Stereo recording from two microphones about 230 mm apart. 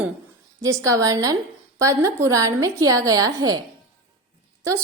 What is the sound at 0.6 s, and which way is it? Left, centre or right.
A woman's voice, centre.